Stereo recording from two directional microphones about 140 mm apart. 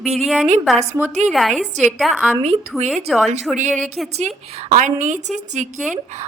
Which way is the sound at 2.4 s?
50° right (ahead or behind).